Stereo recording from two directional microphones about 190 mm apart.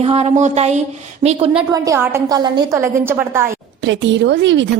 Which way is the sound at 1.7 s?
15° right (ahead or behind).